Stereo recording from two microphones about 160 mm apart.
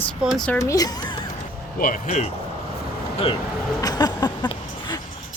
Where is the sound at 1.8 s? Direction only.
60° left (ahead or behind).